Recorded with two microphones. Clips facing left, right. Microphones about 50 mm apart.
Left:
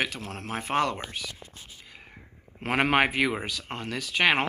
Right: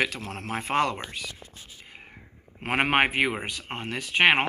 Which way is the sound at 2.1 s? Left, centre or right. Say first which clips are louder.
Even; right.